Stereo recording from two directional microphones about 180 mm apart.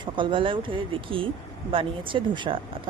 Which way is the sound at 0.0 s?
25° right (ahead or behind).